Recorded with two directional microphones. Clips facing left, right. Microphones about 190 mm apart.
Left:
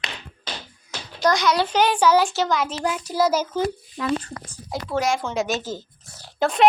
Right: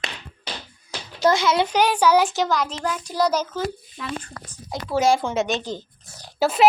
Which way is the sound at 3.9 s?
45° left (ahead or behind).